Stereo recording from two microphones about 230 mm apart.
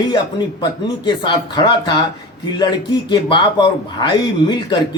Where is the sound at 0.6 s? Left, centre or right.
Centre.